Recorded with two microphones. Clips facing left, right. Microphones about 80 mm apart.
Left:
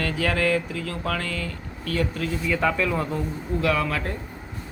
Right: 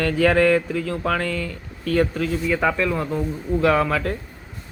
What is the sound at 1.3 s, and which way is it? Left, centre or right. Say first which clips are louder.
Speech: right 3 dB; left.